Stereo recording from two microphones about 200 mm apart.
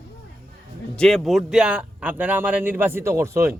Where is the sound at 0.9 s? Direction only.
5° left (ahead or behind); by 3.5 s 15° right (ahead or behind).